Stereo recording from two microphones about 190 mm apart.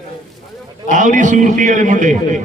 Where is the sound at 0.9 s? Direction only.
40° right (ahead or behind).